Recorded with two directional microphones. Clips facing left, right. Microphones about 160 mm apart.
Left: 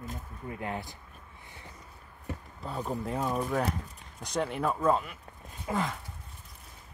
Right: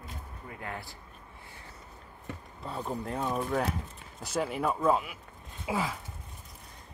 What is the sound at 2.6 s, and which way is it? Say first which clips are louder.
Speech: left 1 dB; centre (ahead or behind).